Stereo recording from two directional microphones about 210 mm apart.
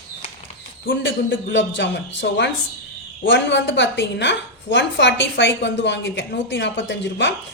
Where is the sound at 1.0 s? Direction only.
60° left (ahead or behind).